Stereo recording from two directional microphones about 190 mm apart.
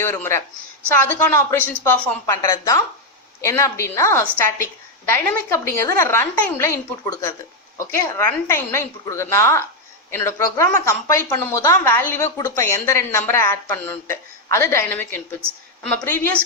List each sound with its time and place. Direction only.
0.0 s speech: 10° left (ahead or behind)
7.8 s speech: 15° left (ahead or behind)